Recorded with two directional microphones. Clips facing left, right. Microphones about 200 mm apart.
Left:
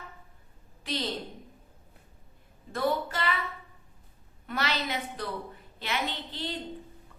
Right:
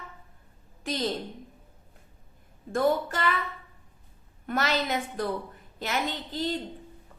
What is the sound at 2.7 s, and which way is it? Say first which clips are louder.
Speech: right 4 dB; 45° right (ahead or behind).